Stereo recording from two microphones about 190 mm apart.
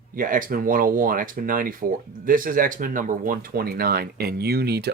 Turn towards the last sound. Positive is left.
turn(degrees=-55)  # may be behind; listen again after turning